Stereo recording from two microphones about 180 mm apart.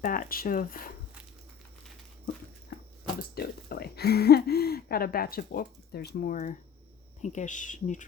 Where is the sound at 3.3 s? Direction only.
60° left (ahead or behind).